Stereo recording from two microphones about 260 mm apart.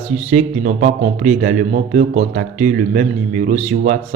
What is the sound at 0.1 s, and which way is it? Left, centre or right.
A man's voice, right.